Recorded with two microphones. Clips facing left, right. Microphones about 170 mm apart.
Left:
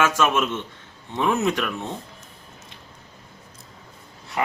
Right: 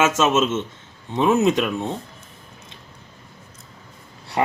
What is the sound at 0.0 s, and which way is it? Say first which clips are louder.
Speech: right 3 dB; 25° right (ahead or behind).